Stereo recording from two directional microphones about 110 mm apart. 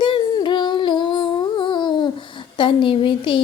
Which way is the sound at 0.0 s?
45° left (ahead or behind).